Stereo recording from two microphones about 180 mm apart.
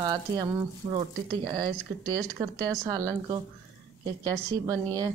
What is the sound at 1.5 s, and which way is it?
Speech, 20° right (ahead or behind).